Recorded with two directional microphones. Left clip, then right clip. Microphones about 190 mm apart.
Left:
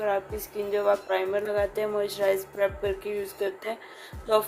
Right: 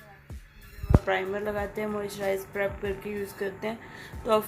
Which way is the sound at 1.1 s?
40° left (ahead or behind).